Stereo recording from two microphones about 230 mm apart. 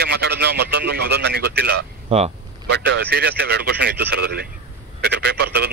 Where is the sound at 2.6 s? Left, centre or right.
Right.